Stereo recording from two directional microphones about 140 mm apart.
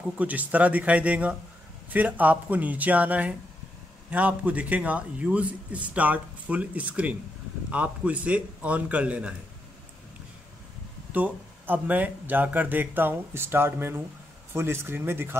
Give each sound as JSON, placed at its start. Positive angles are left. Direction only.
{"t": 0.2, "sound": "a man's voice", "side_deg": -10}
{"t": 11.1, "sound": "a man's voice", "side_deg": -10}